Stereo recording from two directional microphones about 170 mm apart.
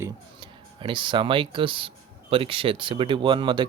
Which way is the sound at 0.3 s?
30° right (ahead or behind).